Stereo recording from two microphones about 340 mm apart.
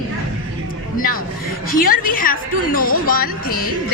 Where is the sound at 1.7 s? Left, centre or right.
Left.